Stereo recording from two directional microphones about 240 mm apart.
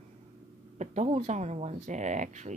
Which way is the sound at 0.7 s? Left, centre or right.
Right.